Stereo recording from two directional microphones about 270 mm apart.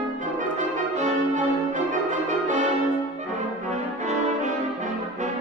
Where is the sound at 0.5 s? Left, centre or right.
Right.